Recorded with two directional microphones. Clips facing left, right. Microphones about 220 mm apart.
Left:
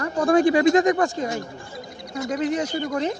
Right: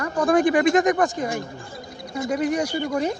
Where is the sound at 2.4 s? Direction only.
10° right (ahead or behind).